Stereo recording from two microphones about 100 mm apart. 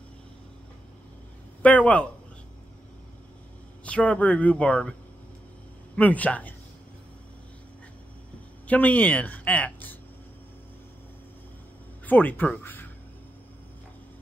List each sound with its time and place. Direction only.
1.6 s a woman's voice: 15° left (ahead or behind)
3.8 s a woman's voice: 15° left (ahead or behind)
5.9 s a woman's voice: 15° left (ahead or behind)
8.6 s a woman's voice: 15° left (ahead or behind)
12.1 s speech: 20° left (ahead or behind)